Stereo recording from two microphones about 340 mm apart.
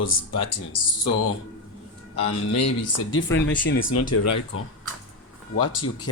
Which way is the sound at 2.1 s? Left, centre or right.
Left.